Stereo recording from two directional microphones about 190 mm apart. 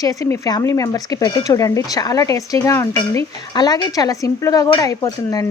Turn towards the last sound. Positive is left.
turn(degrees=20)  # may be behind; listen again after turning